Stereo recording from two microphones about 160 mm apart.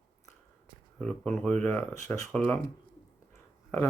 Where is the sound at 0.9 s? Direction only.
5° left (ahead or behind).